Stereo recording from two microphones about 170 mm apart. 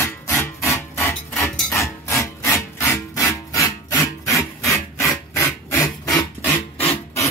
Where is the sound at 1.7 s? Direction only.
15° left (ahead or behind).